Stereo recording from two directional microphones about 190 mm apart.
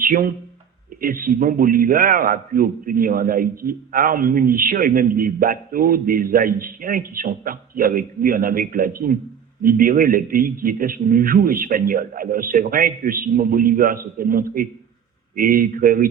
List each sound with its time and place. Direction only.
0.0 s a man's voice: 45° right (ahead or behind)